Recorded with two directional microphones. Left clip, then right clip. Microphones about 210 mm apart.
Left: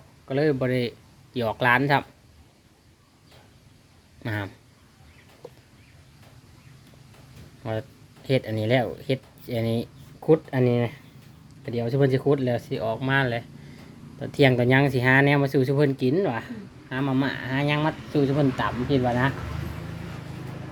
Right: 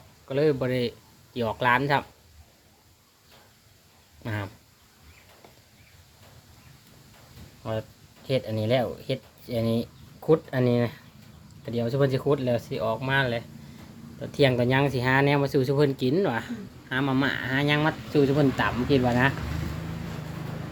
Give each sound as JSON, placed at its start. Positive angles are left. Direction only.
{"t": 0.3, "sound": "speech", "side_deg": 15}
{"t": 4.2, "sound": "speech", "side_deg": 20}
{"t": 7.6, "sound": "speech", "side_deg": 25}